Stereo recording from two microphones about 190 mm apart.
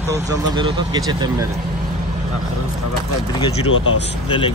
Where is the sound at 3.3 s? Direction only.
25° left (ahead or behind).